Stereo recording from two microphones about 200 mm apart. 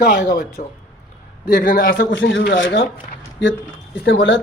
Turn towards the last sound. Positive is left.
turn(degrees=65)  # may be behind; listen again after turning